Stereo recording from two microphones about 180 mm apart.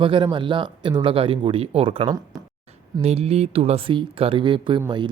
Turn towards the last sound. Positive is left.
turn(degrees=-25)  # may be behind; listen again after turning